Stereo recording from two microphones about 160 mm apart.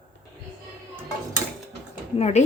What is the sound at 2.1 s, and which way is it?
Speech, 45° left (ahead or behind).